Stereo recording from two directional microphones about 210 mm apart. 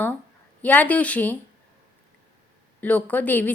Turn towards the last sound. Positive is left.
turn(degrees=10)  # may be behind; listen again after turning